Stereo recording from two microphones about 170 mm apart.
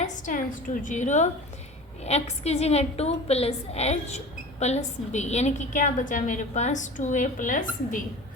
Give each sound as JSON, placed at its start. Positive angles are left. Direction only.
{"t": 0.0, "sound": "a woman's voice", "side_deg": 50}